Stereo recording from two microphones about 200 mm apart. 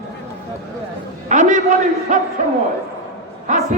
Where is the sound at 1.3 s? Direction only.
40° right (ahead or behind).